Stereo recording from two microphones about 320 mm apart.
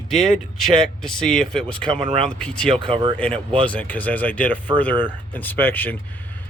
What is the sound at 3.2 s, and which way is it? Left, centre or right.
Speech, centre.